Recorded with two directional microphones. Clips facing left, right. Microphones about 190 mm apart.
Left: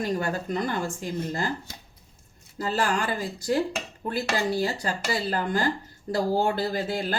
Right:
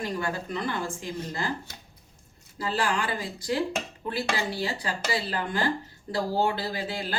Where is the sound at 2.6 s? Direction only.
45° left (ahead or behind).